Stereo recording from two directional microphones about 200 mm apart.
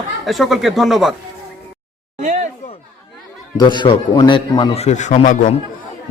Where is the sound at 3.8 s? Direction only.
20° left (ahead or behind).